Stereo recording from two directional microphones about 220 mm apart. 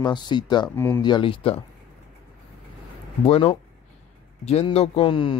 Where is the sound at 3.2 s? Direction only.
25° left (ahead or behind).